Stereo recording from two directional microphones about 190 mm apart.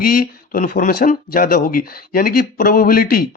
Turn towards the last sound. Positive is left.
turn(degrees=50)  # may be behind; listen again after turning